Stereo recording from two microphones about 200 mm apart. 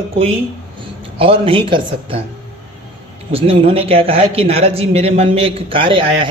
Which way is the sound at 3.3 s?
30° right (ahead or behind).